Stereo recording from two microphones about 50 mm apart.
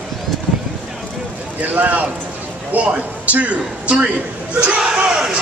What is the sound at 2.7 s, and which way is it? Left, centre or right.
Speech, right.